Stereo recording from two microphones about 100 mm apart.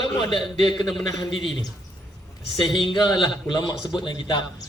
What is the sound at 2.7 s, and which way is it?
A man's voice, 45° left (ahead or behind).